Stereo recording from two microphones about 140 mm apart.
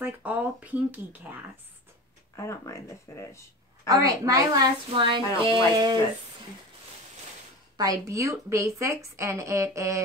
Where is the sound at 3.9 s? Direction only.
25° right (ahead or behind).